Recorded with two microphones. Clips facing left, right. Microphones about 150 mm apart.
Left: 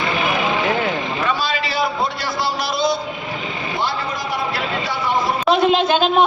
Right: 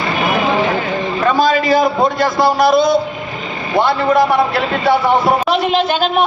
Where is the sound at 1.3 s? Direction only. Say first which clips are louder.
Right 9 dB; 45° right (ahead or behind).